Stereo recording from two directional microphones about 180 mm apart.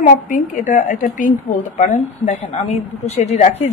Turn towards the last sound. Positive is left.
turn(degrees=35)  # may be behind; listen again after turning